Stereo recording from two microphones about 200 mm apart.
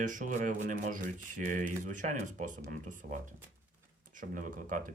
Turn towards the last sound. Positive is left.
turn(degrees=-40)  # may be behind; listen again after turning